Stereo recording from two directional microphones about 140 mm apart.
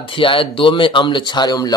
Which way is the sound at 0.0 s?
40° left (ahead or behind).